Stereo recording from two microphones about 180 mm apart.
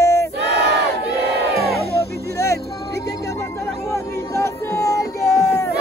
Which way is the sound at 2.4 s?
15° left (ahead or behind).